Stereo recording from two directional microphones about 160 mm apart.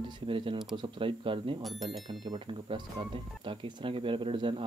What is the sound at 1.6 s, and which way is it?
Speech, centre (ahead or behind).